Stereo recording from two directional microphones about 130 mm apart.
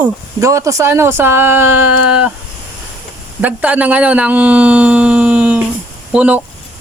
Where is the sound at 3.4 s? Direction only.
10° right (ahead or behind).